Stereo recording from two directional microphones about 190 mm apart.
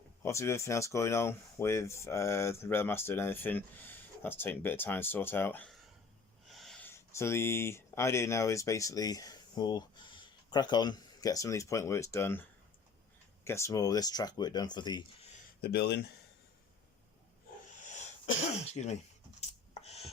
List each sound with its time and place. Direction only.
0.2 s speech: 15° left (ahead or behind)
15.6 s speech: 60° left (ahead or behind)
18.7 s speech: 35° left (ahead or behind)
19.4 s a sound: 35° left (ahead or behind)